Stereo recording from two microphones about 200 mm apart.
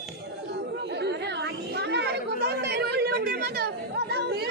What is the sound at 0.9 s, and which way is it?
Chatter, 55° right (ahead or behind).